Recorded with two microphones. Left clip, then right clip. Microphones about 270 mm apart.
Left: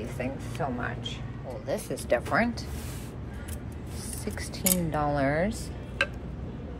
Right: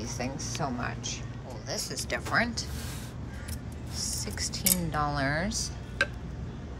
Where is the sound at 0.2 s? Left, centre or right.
Centre.